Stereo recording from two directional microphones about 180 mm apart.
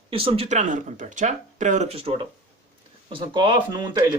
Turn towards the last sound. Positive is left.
turn(degrees=-20)  # may be behind; listen again after turning